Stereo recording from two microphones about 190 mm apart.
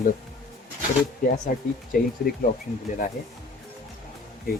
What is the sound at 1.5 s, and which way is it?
Speech, 45° left (ahead or behind).